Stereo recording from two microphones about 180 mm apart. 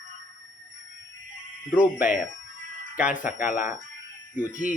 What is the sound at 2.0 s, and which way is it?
Speech, 45° left (ahead or behind).